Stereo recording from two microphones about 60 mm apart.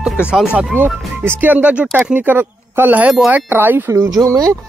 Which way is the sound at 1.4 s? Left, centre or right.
Right.